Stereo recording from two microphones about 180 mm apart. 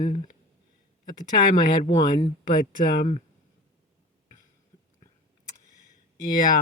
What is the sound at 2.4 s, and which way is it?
Speech, 50° left (ahead or behind).